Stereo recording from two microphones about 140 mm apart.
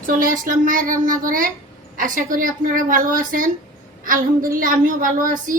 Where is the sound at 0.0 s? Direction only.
80° right.